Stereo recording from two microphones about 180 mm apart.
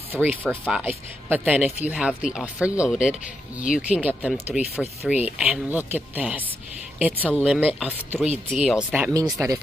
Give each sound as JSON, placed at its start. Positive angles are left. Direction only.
{"t": 0.1, "sound": "speech", "side_deg": -10}
{"t": 9.1, "sound": "speech", "side_deg": -20}